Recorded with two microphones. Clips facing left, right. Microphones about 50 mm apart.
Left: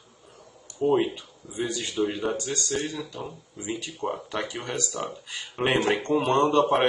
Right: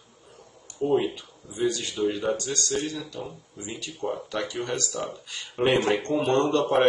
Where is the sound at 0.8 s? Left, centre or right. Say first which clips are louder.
Left 1 dB; left.